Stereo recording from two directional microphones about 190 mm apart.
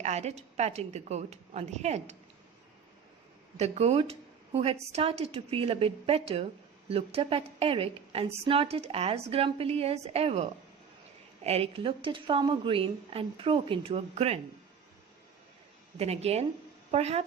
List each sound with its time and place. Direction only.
0.0 s a woman's voice: 35° right (ahead or behind)
3.6 s a woman's voice: 35° right (ahead or behind)
16.0 s a woman's voice: 35° right (ahead or behind)